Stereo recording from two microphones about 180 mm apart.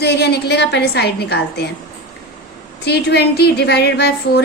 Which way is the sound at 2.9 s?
65° left (ahead or behind).